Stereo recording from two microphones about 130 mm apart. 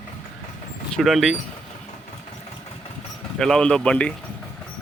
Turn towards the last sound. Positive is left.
turn(degrees=10)  # may be behind; listen again after turning